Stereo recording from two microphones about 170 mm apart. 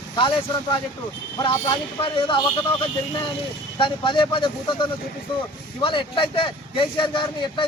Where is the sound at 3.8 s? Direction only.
30° left (ahead or behind).